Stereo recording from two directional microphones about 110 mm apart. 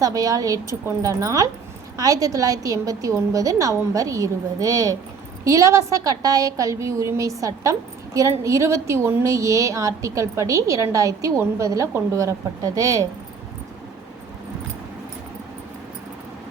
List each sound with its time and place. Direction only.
0.0 s a woman's voice: 30° right (ahead or behind)